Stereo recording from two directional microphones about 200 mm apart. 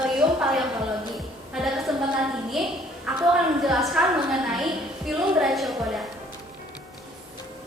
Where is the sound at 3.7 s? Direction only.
Centre (ahead or behind).